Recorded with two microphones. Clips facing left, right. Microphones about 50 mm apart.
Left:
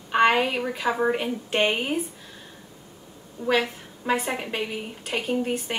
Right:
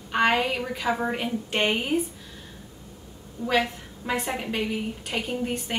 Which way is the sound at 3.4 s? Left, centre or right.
Left.